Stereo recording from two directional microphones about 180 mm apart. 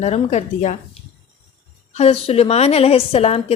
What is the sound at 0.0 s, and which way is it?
Speech, 40° left (ahead or behind).